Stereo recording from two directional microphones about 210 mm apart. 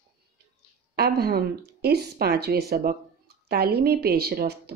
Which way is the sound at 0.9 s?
50° right (ahead or behind).